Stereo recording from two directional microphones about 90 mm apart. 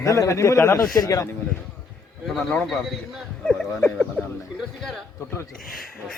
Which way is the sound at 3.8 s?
15° left (ahead or behind).